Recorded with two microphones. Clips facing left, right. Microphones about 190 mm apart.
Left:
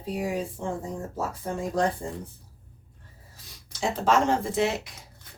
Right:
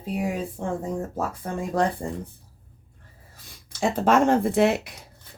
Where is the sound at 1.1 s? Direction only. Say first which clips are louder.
Right 2 dB; 55° right (ahead or behind).